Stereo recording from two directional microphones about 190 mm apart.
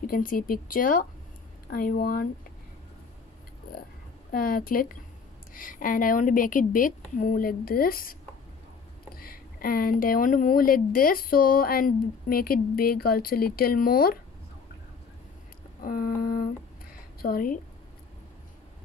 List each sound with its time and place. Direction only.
0.0 s speech: 45° left (ahead or behind)
4.3 s speech: 50° left (ahead or behind)
15.8 s speech: 50° left (ahead or behind)